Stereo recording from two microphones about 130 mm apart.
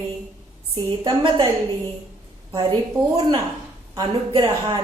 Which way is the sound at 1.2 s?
40° right (ahead or behind).